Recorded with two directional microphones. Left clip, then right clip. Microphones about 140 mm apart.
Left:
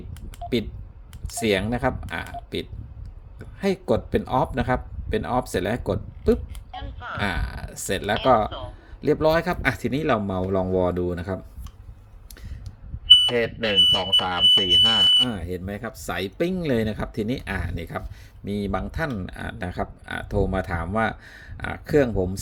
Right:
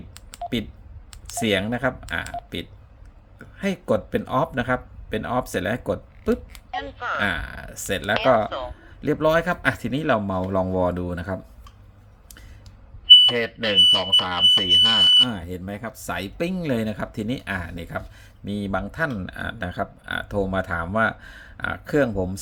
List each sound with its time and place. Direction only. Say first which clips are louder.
1.3 s speech: even; 15° left (ahead or behind)
3.3 s speech: left 3 dB; 15° left (ahead or behind)
6.7 s a sound: right 7 dB; 50° right (ahead or behind)
7.2 s speech: even; 15° left (ahead or behind)
8.4 s a man's voice: right 4 dB; 45° right (ahead or behind)
9.0 s speech: even; 15° left (ahead or behind)
13.1 s speech: right 3 dB; centre (ahead or behind)
15.3 s speech: left 1 dB; 25° left (ahead or behind)